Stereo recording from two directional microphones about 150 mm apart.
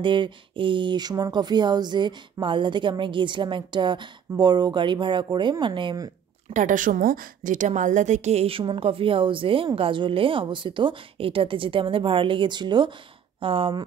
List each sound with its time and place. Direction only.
0.0 s speech: 35° right (ahead or behind)
6.5 s a woman's voice: 60° right (ahead or behind); by 13.8 s 35° right (ahead or behind)